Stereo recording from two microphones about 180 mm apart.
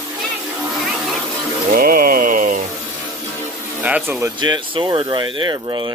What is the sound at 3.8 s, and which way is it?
Speech, 5° right (ahead or behind).